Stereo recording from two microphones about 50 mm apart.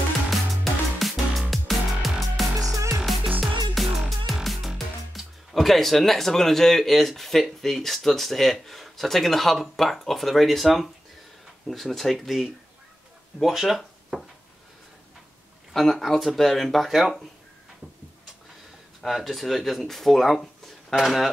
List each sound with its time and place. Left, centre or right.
0.9 s music: centre
2.7 s music: right
3.4 s music: centre
4.3 s speech: centre
15.7 s speech: centre
19.0 s speech: centre